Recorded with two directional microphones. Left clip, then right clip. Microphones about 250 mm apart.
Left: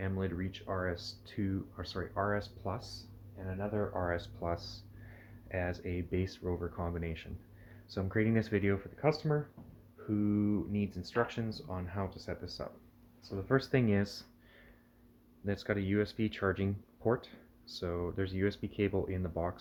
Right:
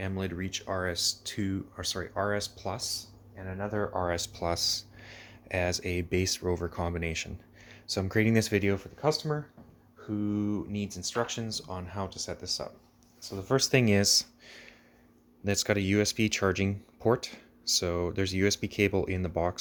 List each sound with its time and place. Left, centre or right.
0.0 s speech: right
9.0 s speech: centre; by 19.5 s right